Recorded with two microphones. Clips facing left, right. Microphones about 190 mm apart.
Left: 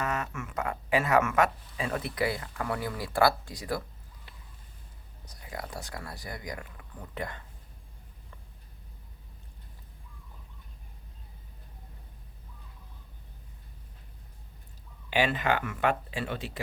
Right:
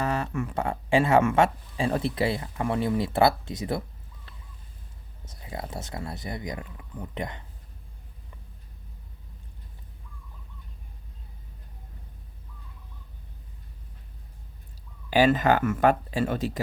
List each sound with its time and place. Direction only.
0.0 s speech: 35° right (ahead or behind)
5.2 s speech: 25° right (ahead or behind)
15.1 s speech: 40° right (ahead or behind)